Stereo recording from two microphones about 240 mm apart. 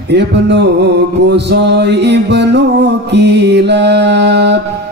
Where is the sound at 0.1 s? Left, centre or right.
Right.